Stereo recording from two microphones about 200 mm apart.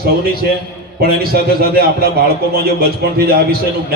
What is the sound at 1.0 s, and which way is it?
A man's voice, 50° right (ahead or behind).